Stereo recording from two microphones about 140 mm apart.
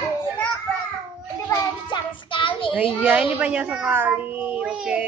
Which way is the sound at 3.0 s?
10° right (ahead or behind).